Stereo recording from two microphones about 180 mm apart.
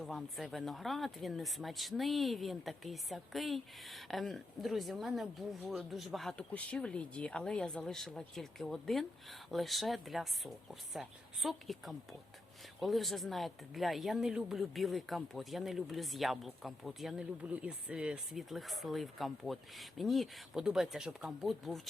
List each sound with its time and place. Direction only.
0.0 s speech: centre (ahead or behind)